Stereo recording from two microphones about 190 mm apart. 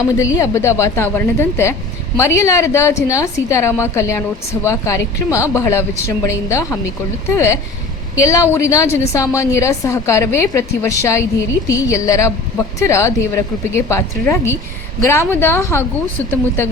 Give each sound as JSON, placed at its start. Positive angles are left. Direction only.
{"t": 0.0, "sound": "a woman's voice", "side_deg": 15}